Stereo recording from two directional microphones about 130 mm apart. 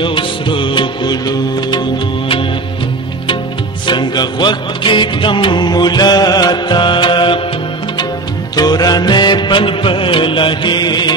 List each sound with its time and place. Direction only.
0.0 s music: 40° left (ahead or behind)
3.8 s music: 35° left (ahead or behind)
8.5 s music: 30° left (ahead or behind)